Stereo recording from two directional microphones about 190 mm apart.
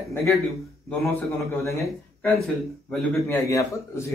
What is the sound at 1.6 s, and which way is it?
Speech, 15° left (ahead or behind).